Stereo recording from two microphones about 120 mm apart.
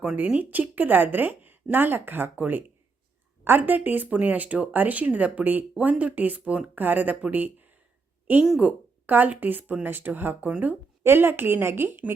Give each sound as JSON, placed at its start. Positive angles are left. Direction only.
{"t": 0.0, "sound": "speech", "side_deg": -10}